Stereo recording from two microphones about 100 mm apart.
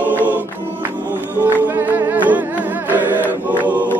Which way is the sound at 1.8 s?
20° right (ahead or behind).